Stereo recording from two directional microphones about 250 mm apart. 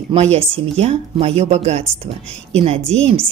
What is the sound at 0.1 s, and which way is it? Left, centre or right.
Speech, right.